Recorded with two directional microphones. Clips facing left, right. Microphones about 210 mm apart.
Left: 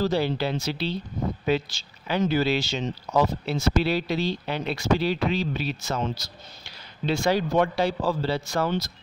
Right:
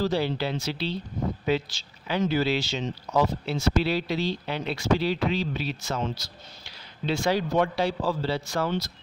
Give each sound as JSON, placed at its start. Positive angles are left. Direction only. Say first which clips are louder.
{"t": 0.0, "sound": "speech", "louder": "left 2 dB", "side_deg": 45}
{"t": 2.0, "sound": "speech", "louder": "left 1 dB", "side_deg": 50}